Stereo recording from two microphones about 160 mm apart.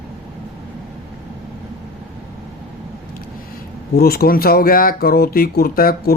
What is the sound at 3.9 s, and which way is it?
Speech, 75° left (ahead or behind).